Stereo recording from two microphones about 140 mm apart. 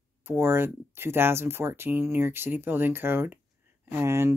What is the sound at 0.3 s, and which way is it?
Speech, 15° right (ahead or behind).